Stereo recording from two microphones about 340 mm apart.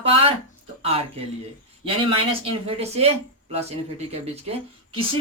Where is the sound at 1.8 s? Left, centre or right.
Centre.